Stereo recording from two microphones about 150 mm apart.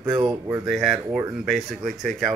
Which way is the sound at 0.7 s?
5° right (ahead or behind).